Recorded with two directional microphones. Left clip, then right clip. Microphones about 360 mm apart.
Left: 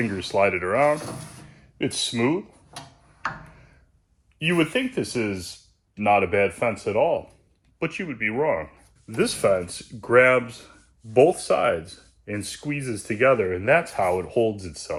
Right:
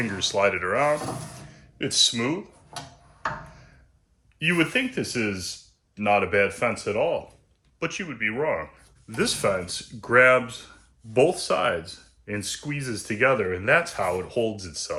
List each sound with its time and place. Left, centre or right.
0.2 s speech: centre
4.4 s speech: centre